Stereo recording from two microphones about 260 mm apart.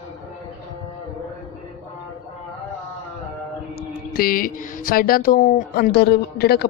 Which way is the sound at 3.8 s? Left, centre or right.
Left.